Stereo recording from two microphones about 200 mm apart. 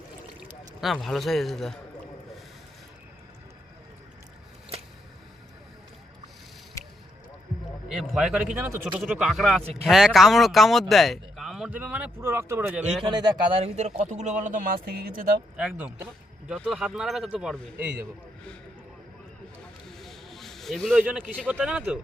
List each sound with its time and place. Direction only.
0.8 s speech: centre (ahead or behind)
7.9 s speech: centre (ahead or behind); by 15.4 s 45° right (ahead or behind)
15.5 s speech: 5° right (ahead or behind)
20.0 s a sound: centre (ahead or behind)
21.2 s speech: 5° left (ahead or behind)